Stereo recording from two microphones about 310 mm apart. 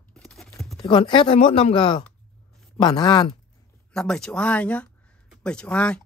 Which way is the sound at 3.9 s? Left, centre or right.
Centre.